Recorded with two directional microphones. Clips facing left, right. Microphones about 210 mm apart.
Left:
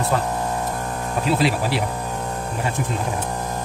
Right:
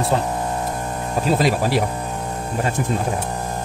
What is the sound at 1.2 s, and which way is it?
Speech, 45° right (ahead or behind).